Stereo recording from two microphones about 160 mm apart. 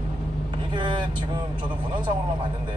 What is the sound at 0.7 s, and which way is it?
Speech, 30° right (ahead or behind).